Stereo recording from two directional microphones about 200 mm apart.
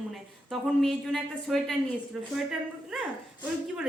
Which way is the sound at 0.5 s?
Centre (ahead or behind).